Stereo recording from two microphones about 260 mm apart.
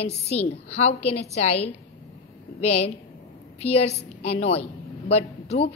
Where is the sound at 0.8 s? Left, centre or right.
Left.